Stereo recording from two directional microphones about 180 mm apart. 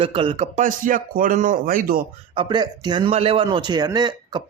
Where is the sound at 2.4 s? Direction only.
25° right (ahead or behind).